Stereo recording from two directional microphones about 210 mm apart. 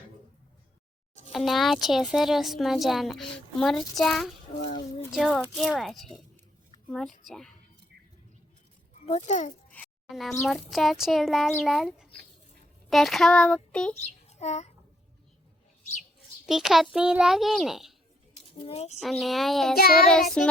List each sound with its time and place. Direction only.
1.3 s a woman's voice: centre (ahead or behind)
7.3 s a woman's voice: centre (ahead or behind)
9.0 s a child's voice: 30° left (ahead or behind)
9.6 s music: 5° left (ahead or behind)
10.4 s a woman's voice: centre (ahead or behind)
14.0 s a child's voice: 30° left (ahead or behind)
16.5 s a woman's voice: centre (ahead or behind)
18.5 s speech: 30° left (ahead or behind)
18.9 s a woman's voice: centre (ahead or behind)
19.7 s child singing: 45° left (ahead or behind)
20.1 s a woman's voice: 5° left (ahead or behind)